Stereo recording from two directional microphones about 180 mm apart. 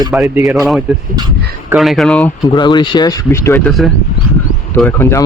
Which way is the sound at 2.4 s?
25° left (ahead or behind).